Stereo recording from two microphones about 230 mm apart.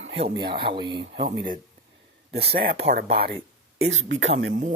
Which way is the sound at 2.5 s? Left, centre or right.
Right.